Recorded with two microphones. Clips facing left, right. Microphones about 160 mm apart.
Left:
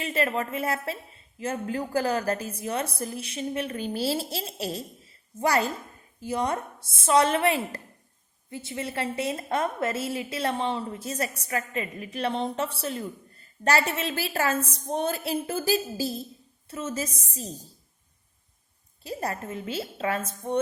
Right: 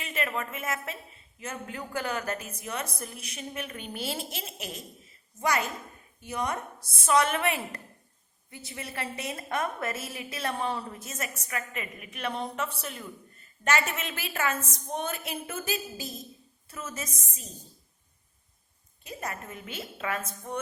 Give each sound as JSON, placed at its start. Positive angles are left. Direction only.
{"t": 0.0, "sound": "a woman's voice", "side_deg": 30}
{"t": 19.0, "sound": "a woman's voice", "side_deg": 35}